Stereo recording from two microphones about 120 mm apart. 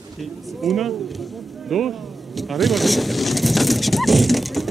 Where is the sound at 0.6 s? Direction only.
Centre (ahead or behind).